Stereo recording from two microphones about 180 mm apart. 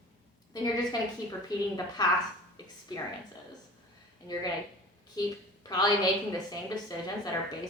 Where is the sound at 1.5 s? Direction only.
20° left (ahead or behind).